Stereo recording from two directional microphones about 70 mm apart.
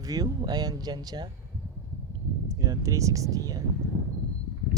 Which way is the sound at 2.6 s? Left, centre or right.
Right.